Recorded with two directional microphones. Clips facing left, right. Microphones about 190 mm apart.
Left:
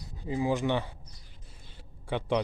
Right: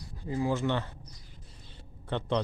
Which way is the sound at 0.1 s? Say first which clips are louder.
Left 1 dB; 15° left (ahead or behind).